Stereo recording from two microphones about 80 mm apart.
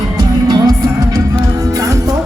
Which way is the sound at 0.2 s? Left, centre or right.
Right.